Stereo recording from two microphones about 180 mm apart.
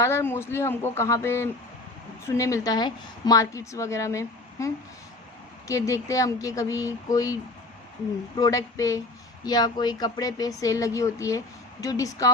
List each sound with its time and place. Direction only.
0.0 s a woman's voice: 15° left (ahead or behind)
8.4 s speech: 20° left (ahead or behind)